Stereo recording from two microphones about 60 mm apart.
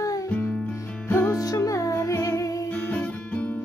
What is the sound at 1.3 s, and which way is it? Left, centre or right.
Music, left.